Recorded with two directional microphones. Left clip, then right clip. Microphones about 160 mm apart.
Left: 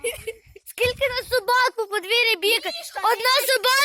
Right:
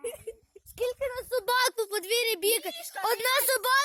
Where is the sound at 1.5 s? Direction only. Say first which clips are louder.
Left 5 dB; 40° right (ahead or behind).